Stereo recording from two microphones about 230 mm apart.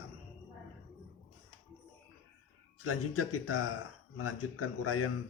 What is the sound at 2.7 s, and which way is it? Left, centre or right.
Speech, left.